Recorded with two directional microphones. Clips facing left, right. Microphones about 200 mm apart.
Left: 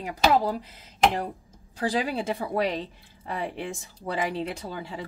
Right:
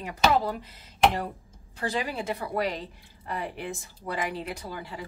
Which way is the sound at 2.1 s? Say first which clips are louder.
Left 3 dB; 30° left (ahead or behind).